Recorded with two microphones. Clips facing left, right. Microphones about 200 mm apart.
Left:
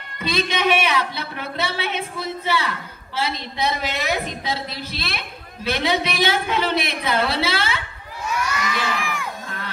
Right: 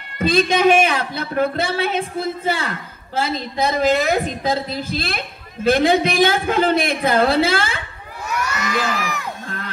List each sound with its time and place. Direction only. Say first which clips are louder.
0.2 s a woman's voice: right 7 dB; 45° right (ahead or behind)
8.6 s crowd: right 3 dB; 40° right (ahead or behind)